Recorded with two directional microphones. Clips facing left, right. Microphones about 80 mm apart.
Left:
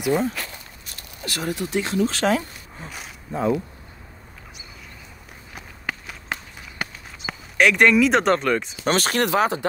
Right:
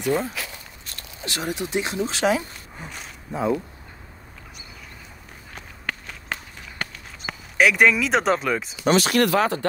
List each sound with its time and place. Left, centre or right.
0.0 s speech: centre
1.2 s speech: right
2.9 s a sound: centre
5.5 s walk: centre
6.8 s run: centre
8.8 s speech: left
9.2 s speech: left